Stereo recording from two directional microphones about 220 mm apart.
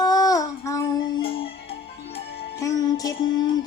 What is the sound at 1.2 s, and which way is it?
Child singing, 25° left (ahead or behind).